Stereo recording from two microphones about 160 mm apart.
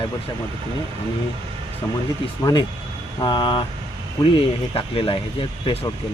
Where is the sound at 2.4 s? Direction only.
25° left (ahead or behind).